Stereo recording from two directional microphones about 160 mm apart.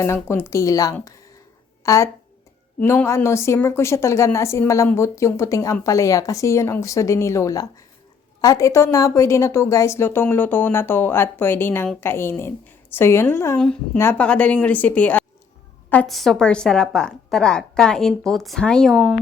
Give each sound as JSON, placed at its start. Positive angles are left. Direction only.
{"t": 0.0, "sound": "a woman's voice", "side_deg": 15}
{"t": 13.6, "sound": "a woman's voice", "side_deg": 5}